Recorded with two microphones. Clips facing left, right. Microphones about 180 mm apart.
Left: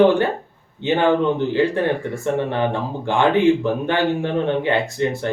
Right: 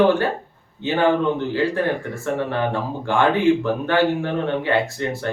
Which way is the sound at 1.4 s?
20° left (ahead or behind).